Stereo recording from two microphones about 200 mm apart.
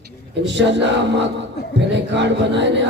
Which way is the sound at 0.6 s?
60° right (ahead or behind).